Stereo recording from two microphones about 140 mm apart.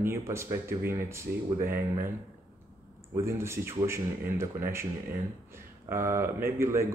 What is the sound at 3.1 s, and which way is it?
Speech, 20° right (ahead or behind).